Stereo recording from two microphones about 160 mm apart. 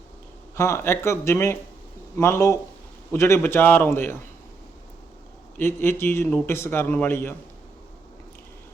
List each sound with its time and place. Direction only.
0.5 s a man's voice: 15° left (ahead or behind)
5.5 s a man's voice: 15° left (ahead or behind)